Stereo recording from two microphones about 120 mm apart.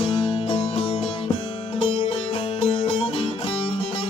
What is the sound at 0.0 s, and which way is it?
Music, 55° left (ahead or behind).